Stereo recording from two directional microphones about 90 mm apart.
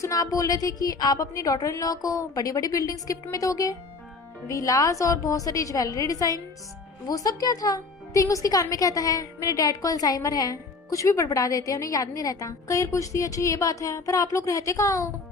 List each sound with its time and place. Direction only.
0.0 s speech: 40° left (ahead or behind)